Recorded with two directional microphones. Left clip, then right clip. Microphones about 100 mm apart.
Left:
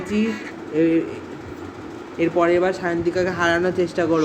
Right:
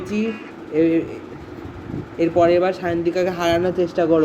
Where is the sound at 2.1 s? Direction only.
30° right (ahead or behind).